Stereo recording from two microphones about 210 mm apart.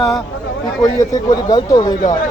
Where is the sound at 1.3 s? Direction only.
20° left (ahead or behind).